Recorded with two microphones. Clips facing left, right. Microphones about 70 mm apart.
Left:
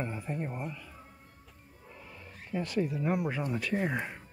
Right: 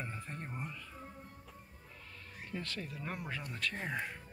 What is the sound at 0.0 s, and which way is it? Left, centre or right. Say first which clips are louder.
Speech: left 8 dB; centre.